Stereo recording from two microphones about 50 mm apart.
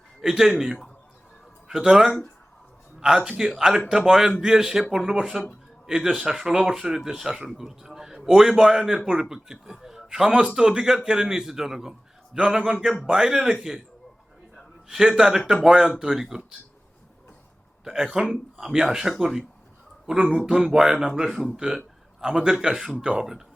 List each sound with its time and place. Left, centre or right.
0.2 s a man's voice: centre
1.6 s a man's voice: centre
14.8 s a man's voice: centre
17.8 s a man's voice: centre
20.5 s a man's voice: centre
21.5 s a man's voice: centre